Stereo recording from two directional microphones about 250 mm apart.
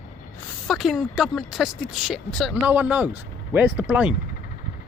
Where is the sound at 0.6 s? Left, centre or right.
Centre.